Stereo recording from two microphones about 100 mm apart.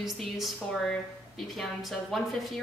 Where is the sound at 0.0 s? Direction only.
Centre (ahead or behind).